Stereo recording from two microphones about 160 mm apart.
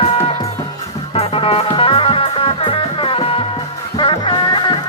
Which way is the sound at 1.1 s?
35° left (ahead or behind).